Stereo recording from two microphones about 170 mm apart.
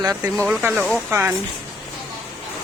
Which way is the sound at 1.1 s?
15° right (ahead or behind).